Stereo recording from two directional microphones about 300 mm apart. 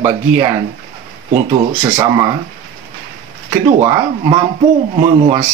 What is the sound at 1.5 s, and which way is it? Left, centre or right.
Speech, centre.